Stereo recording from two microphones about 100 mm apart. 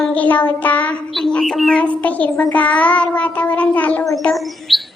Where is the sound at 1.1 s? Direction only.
5° left (ahead or behind).